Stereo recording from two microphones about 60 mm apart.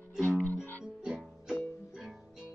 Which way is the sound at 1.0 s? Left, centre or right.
Centre.